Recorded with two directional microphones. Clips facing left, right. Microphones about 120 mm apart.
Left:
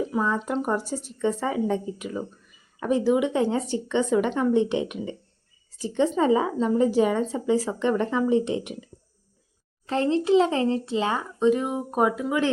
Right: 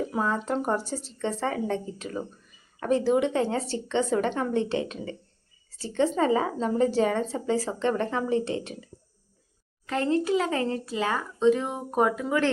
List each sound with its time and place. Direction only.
0.7 s a woman's voice: 10° left (ahead or behind)
9.8 s speech: 30° left (ahead or behind); by 12.5 s 15° left (ahead or behind)